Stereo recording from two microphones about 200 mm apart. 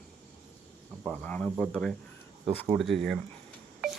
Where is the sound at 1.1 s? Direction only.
5° left (ahead or behind).